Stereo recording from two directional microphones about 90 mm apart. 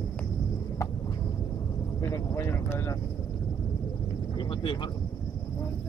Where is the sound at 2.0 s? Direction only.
30° left (ahead or behind).